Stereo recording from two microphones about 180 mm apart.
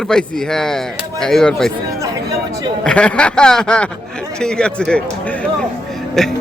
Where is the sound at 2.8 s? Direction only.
5° left (ahead or behind).